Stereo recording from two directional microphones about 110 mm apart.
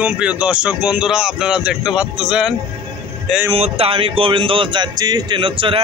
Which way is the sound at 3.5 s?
65° right (ahead or behind).